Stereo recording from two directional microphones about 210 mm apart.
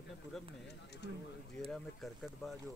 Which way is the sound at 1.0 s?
50° left (ahead or behind).